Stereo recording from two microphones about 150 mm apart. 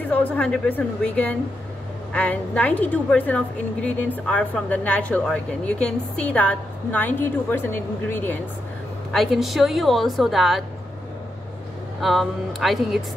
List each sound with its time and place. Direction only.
0.0 s a woman's voice: 10° left (ahead or behind)
9.1 s a woman's voice: centre (ahead or behind)
12.0 s a woman's voice: centre (ahead or behind)